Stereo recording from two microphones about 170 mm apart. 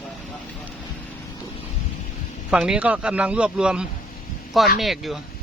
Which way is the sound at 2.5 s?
5° right (ahead or behind).